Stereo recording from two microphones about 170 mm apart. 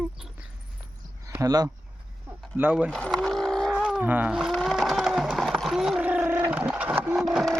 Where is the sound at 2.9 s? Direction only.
5° left (ahead or behind).